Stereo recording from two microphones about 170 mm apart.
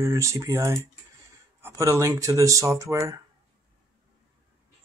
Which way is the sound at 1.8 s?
20° right (ahead or behind).